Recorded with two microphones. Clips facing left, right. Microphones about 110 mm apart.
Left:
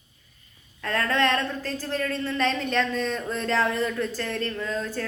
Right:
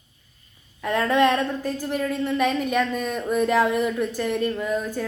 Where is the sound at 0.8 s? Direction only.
15° right (ahead or behind).